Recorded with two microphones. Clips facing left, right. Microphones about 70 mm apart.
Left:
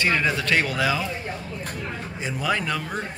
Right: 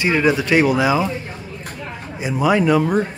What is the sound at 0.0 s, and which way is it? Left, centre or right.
Speech, centre.